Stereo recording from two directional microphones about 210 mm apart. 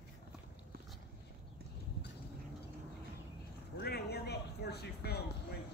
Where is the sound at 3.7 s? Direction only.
50° left (ahead or behind).